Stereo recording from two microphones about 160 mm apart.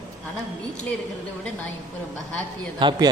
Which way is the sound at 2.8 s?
25° right (ahead or behind).